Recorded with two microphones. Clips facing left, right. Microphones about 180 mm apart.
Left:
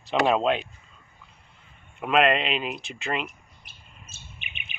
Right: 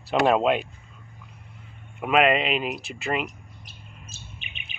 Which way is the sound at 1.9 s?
5° right (ahead or behind).